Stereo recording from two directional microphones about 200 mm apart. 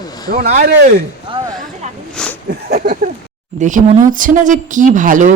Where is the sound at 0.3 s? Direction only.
45° right (ahead or behind).